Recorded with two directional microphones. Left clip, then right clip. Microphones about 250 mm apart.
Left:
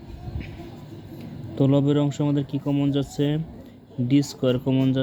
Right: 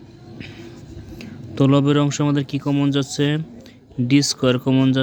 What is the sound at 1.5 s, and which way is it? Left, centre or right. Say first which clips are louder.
Speech: right 4 dB; right.